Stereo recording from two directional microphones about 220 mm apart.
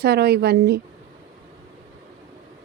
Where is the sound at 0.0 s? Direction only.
45° right (ahead or behind).